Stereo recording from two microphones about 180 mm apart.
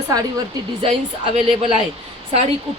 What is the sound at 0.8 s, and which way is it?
Speech, 30° right (ahead or behind).